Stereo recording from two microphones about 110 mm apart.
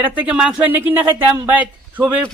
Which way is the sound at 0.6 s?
20° right (ahead or behind).